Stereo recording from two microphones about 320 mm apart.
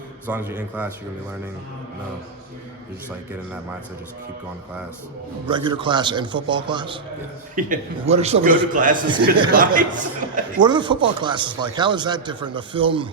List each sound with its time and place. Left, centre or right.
0.3 s a man's voice: centre
5.5 s a man's voice: centre
10.6 s speech: centre